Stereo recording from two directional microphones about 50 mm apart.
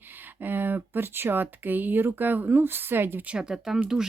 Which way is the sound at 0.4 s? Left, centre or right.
Right.